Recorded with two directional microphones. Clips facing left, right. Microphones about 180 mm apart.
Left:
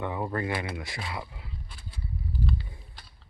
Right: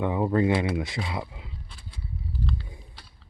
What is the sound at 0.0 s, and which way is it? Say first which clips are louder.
Speech: right 7 dB; 15° right (ahead or behind).